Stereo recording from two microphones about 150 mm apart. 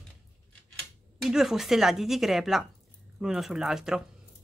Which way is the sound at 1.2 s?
Centre (ahead or behind).